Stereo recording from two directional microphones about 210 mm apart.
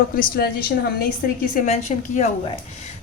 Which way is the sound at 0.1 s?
45° left (ahead or behind).